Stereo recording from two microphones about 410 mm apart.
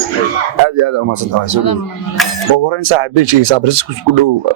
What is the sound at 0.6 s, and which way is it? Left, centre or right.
Speech, right.